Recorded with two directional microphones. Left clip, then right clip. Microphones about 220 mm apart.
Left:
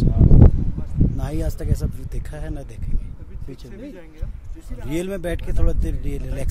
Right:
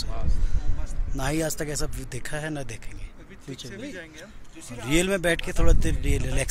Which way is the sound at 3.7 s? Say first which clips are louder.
Even; 35° left (ahead or behind).